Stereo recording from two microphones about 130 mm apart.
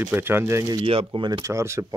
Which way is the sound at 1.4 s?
20° right (ahead or behind).